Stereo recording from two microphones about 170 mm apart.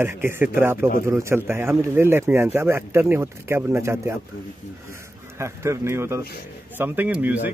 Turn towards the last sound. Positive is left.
turn(degrees=-10)  # may be behind; listen again after turning